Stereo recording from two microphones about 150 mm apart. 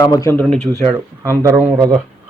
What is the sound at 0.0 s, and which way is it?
Speech, 20° left (ahead or behind).